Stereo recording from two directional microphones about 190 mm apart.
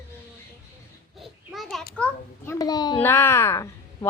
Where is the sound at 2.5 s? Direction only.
20° left (ahead or behind).